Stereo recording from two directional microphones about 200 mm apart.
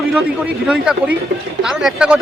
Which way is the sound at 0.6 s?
5° right (ahead or behind).